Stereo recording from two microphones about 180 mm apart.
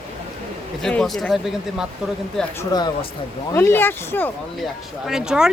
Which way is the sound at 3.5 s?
15° left (ahead or behind).